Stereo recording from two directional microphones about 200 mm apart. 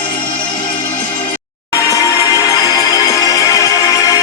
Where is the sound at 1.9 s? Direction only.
15° left (ahead or behind).